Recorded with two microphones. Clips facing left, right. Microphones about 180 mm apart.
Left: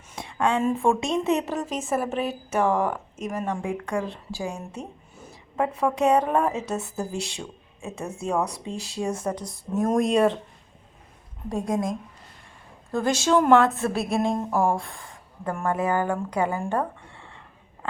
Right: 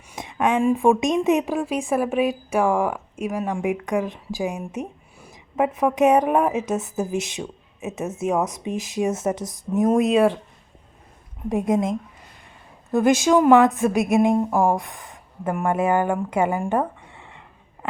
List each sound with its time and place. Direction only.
0.1 s a woman's voice: 20° right (ahead or behind)
9.9 s speech: 5° right (ahead or behind)
11.4 s a woman's voice: 20° right (ahead or behind)